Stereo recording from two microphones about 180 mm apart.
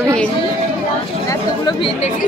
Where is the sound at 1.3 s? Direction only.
25° left (ahead or behind).